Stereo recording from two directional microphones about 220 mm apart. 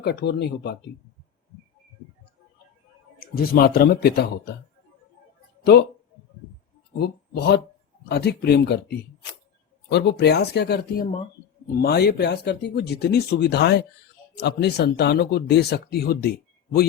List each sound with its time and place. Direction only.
0.0 s speech: 50° left (ahead or behind)
3.5 s speech: 45° left (ahead or behind)
7.0 s speech: 45° left (ahead or behind)
9.9 s speech: 50° left (ahead or behind)